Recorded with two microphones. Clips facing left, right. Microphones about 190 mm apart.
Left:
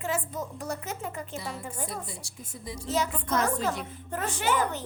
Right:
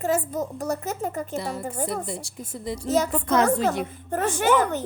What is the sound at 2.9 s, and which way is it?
Speech, 45° right (ahead or behind).